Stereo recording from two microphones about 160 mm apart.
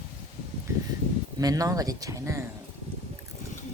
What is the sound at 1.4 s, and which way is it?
Speech, 20° right (ahead or behind).